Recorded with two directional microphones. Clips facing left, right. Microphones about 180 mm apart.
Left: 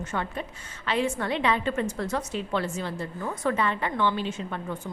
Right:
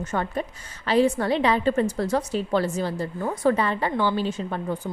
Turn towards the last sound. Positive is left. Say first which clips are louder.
# right 5 dB
turn(degrees=-35)  # may be behind; listen again after turning